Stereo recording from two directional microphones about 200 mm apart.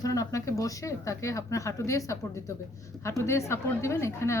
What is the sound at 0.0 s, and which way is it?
A woman's voice, 15° left (ahead or behind).